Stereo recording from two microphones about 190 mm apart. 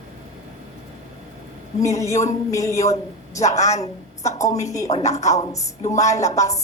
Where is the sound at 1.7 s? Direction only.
15° left (ahead or behind).